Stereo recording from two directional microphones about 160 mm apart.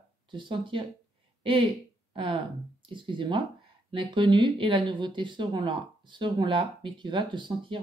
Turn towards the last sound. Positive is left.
turn(degrees=-30)  # may be behind; listen again after turning